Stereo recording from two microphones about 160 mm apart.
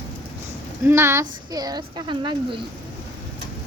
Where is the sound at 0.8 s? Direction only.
15° right (ahead or behind).